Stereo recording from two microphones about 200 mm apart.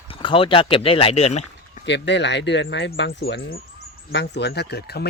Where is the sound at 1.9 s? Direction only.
60° left (ahead or behind).